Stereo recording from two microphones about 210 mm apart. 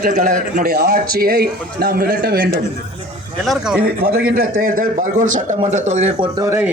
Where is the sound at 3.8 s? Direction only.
45° right (ahead or behind).